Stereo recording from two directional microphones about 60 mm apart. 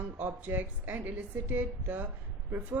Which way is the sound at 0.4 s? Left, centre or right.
Right.